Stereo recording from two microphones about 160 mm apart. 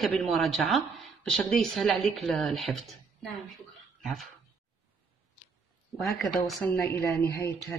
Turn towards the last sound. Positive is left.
turn(degrees=15)  # may be behind; listen again after turning